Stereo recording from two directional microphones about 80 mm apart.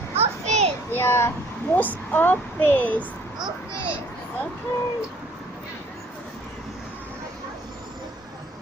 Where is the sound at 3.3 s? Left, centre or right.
Right.